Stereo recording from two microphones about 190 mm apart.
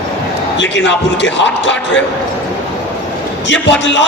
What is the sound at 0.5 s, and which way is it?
A man's voice, 70° left (ahead or behind).